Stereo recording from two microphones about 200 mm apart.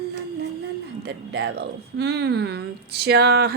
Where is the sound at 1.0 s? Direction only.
60° right (ahead or behind).